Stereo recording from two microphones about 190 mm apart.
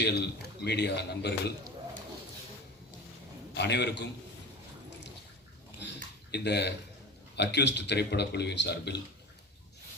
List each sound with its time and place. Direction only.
0.0 s speech: 60° left (ahead or behind)
3.5 s speech: 65° left (ahead or behind)
6.3 s speech: 60° left (ahead or behind)